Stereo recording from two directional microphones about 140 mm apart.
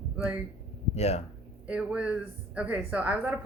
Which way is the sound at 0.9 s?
50° left (ahead or behind).